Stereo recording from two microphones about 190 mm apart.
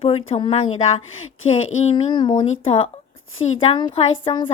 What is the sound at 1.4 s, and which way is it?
Speech, 90° left.